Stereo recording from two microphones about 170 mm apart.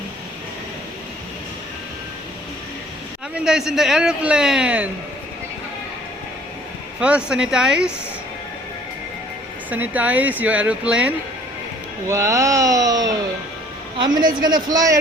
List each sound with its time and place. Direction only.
3.3 s a man's voice: 5° right (ahead or behind)
7.0 s a man's voice: 5° right (ahead or behind)
9.6 s speech: 10° right (ahead or behind)
12.0 s speech: 15° right (ahead or behind)
14.4 s speech: 25° right (ahead or behind)